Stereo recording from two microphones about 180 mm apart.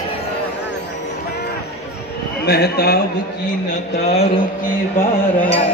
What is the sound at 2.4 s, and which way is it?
Speech, 65° left (ahead or behind).